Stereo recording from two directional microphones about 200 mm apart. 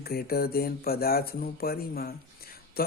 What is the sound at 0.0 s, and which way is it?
Speech, 50° left (ahead or behind).